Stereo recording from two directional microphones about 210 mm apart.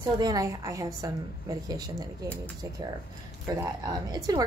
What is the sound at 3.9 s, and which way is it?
Speech, 20° right (ahead or behind).